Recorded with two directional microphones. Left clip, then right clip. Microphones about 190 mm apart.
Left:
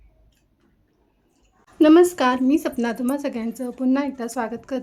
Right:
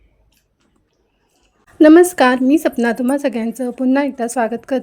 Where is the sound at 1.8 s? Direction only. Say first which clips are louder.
Right 6 dB; 15° right (ahead or behind).